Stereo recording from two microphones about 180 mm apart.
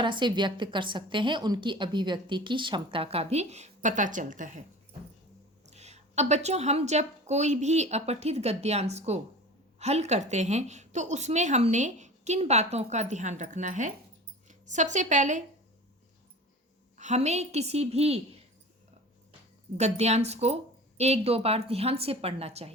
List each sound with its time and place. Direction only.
0.0 s a woman's voice: 25° right (ahead or behind); by 4.6 s 45° right (ahead or behind)
5.6 s a woman's voice: 40° right (ahead or behind)
17.0 s a woman's voice: 40° right (ahead or behind)
19.7 s a woman's voice: 35° right (ahead or behind)